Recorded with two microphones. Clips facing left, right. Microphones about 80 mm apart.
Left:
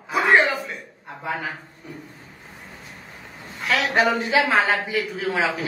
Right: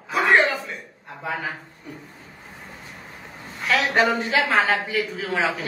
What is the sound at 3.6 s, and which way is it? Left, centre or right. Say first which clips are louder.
A man's voice: even; centre.